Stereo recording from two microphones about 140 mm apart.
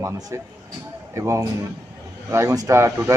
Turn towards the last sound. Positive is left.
turn(degrees=-20)  # may be behind; listen again after turning